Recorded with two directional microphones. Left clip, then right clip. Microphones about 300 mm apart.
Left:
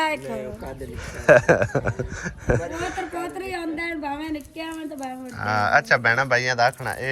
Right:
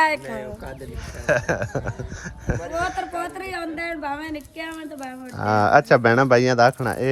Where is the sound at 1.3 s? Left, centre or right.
Centre.